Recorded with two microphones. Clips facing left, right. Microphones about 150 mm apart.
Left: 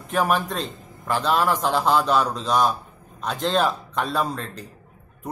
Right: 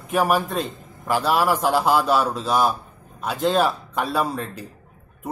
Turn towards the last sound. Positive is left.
turn(degrees=-10)  # may be behind; listen again after turning